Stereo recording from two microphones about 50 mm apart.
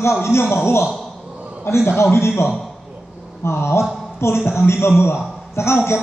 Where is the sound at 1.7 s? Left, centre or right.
Left.